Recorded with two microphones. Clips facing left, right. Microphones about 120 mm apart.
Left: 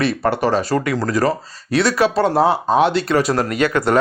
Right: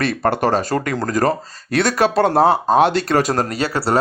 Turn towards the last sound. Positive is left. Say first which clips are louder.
# left 2 dB
turn(degrees=-35)  # may be behind; listen again after turning